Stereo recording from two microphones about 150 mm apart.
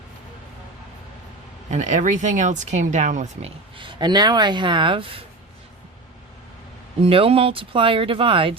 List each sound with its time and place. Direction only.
1.7 s speech: 50° right (ahead or behind)
3.8 s speech: 35° right (ahead or behind)
7.0 s speech: 40° right (ahead or behind)